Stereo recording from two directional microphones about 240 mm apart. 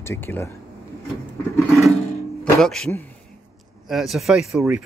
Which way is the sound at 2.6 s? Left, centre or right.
Centre.